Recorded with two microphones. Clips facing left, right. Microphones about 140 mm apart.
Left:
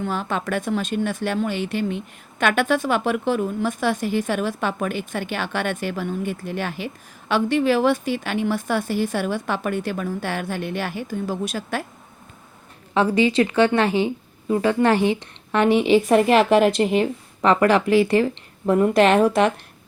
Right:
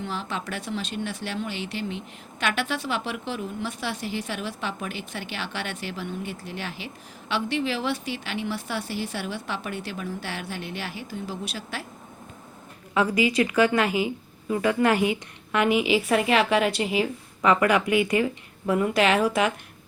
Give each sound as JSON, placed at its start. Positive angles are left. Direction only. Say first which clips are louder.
{"t": 0.0, "sound": "speech", "louder": "left 6 dB", "side_deg": 50}
{"t": 12.9, "sound": "a woman's voice", "louder": "left 4 dB", "side_deg": 30}
{"t": 16.1, "sound": "a woman's voice", "louder": "left 5 dB", "side_deg": 0}
{"t": 17.4, "sound": "speech", "louder": "left 4 dB", "side_deg": 35}